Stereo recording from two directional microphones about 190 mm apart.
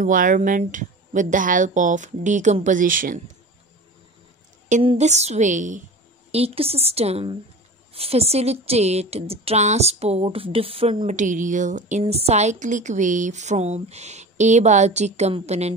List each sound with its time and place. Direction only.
0.0 s speech: 45° right (ahead or behind)
4.6 s speech: 40° right (ahead or behind)